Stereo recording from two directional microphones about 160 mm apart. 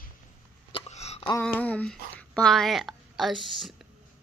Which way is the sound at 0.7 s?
40° left (ahead or behind).